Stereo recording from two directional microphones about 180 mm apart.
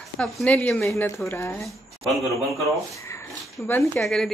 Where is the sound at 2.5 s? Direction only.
Centre (ahead or behind).